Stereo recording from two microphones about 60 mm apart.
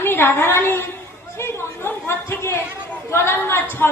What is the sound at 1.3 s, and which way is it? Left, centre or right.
Chatter, left.